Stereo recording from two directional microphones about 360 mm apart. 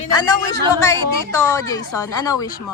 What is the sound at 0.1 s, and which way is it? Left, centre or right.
A woman's voice, centre.